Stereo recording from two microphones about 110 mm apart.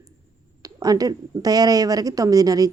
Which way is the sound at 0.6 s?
35° right (ahead or behind).